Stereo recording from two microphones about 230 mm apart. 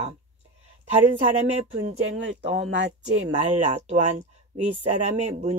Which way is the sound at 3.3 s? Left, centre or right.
Right.